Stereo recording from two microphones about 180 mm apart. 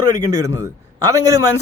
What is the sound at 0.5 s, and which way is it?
Speech, 15° right (ahead or behind).